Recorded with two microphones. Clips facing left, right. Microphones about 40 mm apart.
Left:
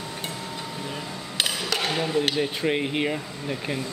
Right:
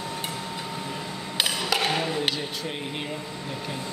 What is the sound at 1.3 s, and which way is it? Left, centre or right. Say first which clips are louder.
Mechanisms: right 1 dB; centre.